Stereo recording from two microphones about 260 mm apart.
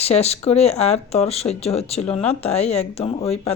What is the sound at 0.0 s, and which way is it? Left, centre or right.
Speech, left.